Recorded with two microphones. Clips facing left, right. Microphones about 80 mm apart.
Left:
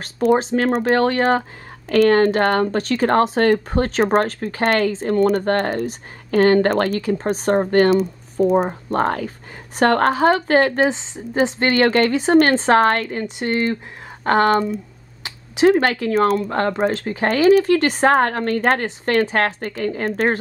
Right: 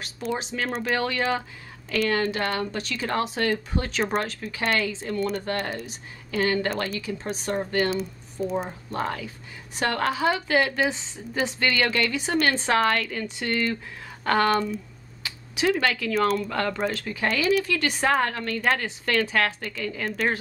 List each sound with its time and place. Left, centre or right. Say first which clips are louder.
0.4 s speech: left 10 dB; left
10.9 s speech: left 7 dB; left